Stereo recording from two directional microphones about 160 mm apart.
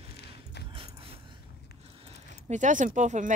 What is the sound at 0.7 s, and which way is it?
Dog, 35° right (ahead or behind).